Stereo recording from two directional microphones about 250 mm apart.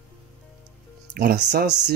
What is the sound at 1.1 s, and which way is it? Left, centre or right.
Speech, right.